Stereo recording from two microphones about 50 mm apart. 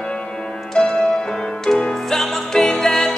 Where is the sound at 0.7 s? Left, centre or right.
Centre.